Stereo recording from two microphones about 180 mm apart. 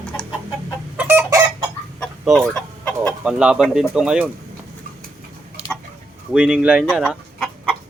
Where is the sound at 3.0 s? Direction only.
5° right (ahead or behind).